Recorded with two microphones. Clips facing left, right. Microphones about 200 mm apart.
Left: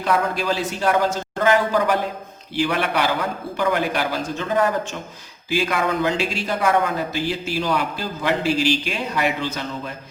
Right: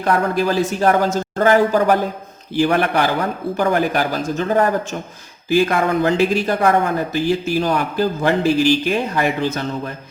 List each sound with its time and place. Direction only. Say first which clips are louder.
0.0 s speech: right 4 dB; 50° right (ahead or behind)